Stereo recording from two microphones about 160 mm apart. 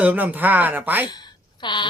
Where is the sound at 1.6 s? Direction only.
30° left (ahead or behind).